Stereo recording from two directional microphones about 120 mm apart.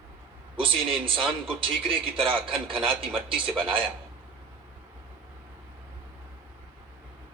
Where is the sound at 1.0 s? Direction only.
45° right (ahead or behind).